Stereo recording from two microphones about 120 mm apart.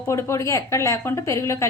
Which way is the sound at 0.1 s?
25° left (ahead or behind).